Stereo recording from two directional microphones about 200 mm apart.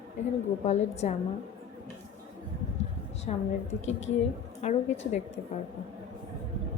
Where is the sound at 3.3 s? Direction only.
35° left (ahead or behind).